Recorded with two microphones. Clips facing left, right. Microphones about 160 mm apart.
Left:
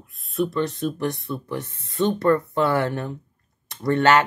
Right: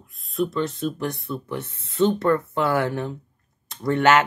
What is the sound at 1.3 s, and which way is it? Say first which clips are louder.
Speech: even; 10° left (ahead or behind).